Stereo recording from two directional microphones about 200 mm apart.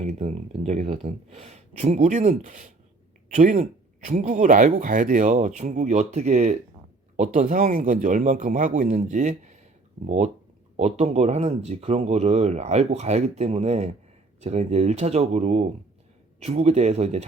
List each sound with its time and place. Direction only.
0.0 s speech: 30° right (ahead or behind)